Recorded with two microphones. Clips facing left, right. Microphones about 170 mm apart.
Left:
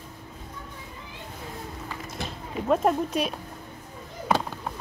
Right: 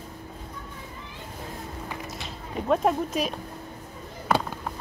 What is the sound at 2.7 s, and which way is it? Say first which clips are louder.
Speech: left 1 dB; centre (ahead or behind).